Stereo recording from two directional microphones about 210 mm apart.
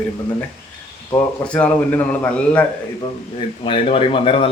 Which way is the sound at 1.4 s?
5° left (ahead or behind).